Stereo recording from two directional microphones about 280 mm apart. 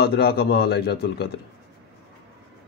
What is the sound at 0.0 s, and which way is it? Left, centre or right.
Speech, left.